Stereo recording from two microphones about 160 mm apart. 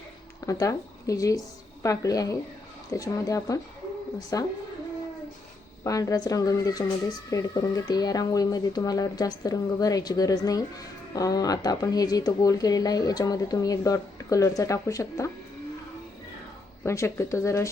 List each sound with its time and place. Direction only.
0.4 s speech: 20° left (ahead or behind)
5.8 s speech: 20° left (ahead or behind)
16.8 s speech: 20° left (ahead or behind)